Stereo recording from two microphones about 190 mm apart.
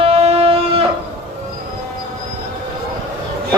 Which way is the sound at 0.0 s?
30° right (ahead or behind).